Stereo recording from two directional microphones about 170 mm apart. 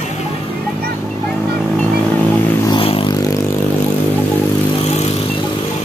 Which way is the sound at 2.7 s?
30° left (ahead or behind).